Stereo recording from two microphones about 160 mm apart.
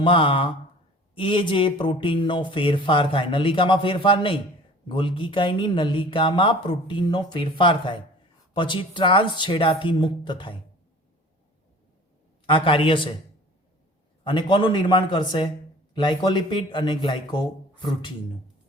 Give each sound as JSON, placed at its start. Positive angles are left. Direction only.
{"t": 0.0, "sound": "speech", "side_deg": 30}
{"t": 12.5, "sound": "speech", "side_deg": 35}
{"t": 14.3, "sound": "speech", "side_deg": 30}